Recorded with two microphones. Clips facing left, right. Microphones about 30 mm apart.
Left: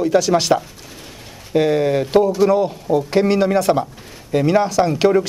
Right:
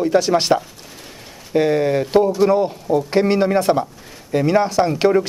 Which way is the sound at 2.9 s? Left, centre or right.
Left.